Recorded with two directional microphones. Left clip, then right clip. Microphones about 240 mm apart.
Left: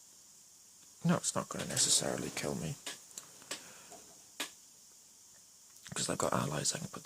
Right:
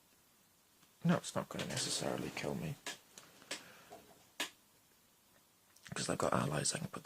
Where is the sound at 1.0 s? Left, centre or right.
Centre.